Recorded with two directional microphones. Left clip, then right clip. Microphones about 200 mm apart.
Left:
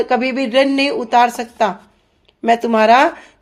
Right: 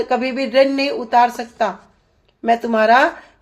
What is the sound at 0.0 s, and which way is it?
Speech, 30° left (ahead or behind).